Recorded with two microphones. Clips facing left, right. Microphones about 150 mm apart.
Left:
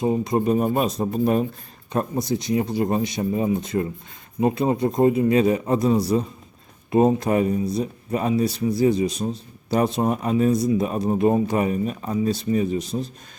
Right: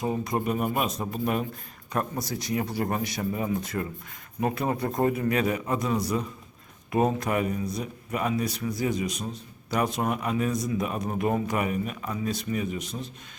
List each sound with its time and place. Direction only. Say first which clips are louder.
0.0 s speech: left 7 dB; 25° left (ahead or behind)